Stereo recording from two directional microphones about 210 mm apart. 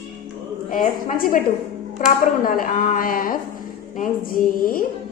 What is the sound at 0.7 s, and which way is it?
A woman's voice, 40° left (ahead or behind).